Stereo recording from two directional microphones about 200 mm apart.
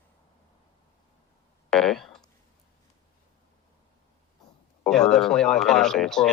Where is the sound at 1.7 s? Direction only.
Centre (ahead or behind).